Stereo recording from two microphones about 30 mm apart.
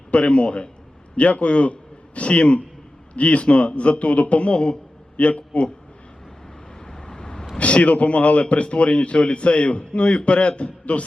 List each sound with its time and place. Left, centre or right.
0.1 s a man's voice: left
1.1 s a man's voice: left
6.8 s vehicle: left
7.6 s a man's voice: left